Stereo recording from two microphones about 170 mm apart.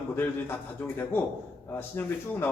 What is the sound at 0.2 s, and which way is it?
A man's voice, 10° left (ahead or behind).